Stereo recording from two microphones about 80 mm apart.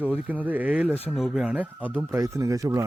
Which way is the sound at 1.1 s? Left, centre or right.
Centre.